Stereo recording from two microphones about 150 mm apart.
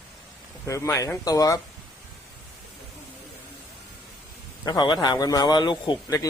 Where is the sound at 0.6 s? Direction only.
20° left (ahead or behind).